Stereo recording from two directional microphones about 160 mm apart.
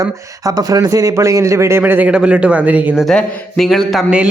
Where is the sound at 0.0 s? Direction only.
20° right (ahead or behind).